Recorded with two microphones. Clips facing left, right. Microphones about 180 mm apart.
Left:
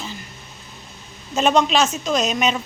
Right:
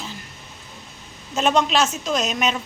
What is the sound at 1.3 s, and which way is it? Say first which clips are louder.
A woman's voice: left 2 dB; centre (ahead or behind).